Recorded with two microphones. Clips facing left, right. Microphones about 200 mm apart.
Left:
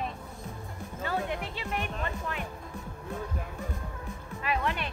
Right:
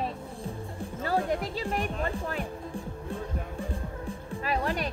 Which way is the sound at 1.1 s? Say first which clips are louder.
Right 4 dB; 35° right (ahead or behind).